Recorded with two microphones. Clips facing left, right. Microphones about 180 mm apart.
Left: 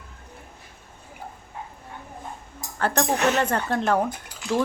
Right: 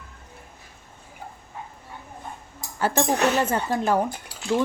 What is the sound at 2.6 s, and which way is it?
Speech, 5° right (ahead or behind).